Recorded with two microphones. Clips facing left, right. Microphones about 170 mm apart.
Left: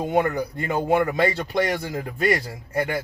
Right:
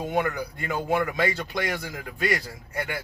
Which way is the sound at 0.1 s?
50° left (ahead or behind).